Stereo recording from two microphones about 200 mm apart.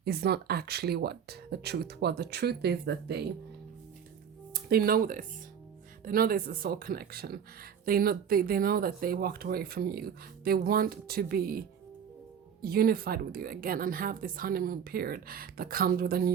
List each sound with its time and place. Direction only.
0.0 s speech: 55° right (ahead or behind)
4.5 s speech: 50° right (ahead or behind)
12.6 s speech: 50° right (ahead or behind)